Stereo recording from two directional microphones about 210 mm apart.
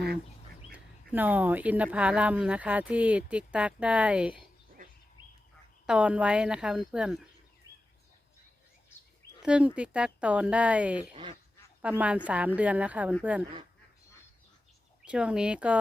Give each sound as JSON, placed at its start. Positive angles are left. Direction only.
{"t": 0.7, "sound": "speech", "side_deg": -10}
{"t": 5.8, "sound": "speech", "side_deg": -5}
{"t": 9.4, "sound": "speech", "side_deg": -5}
{"t": 11.1, "sound": "speech", "side_deg": -25}
{"t": 11.8, "sound": "speech", "side_deg": -5}
{"t": 15.0, "sound": "speech", "side_deg": -5}